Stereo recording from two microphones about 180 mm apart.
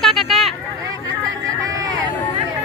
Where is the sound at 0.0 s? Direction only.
Centre (ahead or behind).